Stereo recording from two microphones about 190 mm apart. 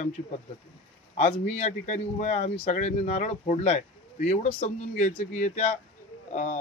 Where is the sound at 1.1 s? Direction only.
40° left (ahead or behind).